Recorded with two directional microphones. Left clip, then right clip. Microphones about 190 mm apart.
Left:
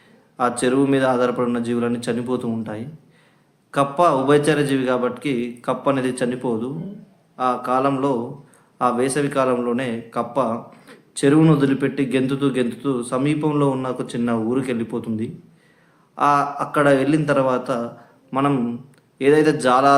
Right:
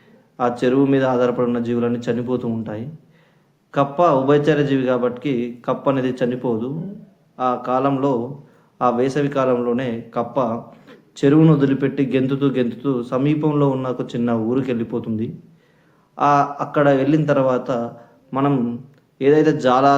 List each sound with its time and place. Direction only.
0.3 s a man's voice: 15° left (ahead or behind)